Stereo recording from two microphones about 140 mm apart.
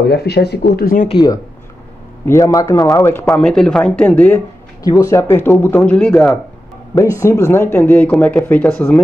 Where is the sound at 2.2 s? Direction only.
20° left (ahead or behind).